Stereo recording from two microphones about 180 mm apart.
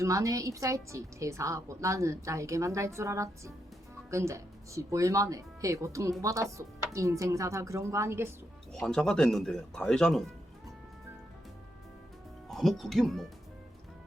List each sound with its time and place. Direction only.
0.0 s a woman's voice: 20° right (ahead or behind)
8.7 s speech: 5° left (ahead or behind)
12.5 s speech: centre (ahead or behind)